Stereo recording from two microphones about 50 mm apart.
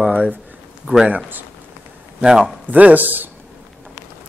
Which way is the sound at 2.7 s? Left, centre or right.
Right.